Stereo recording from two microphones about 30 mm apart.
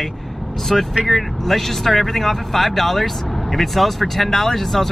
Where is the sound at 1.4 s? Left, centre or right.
Centre.